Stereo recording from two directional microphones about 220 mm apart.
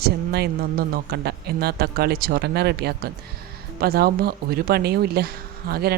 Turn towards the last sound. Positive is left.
turn(degrees=-45)  # may be behind; listen again after turning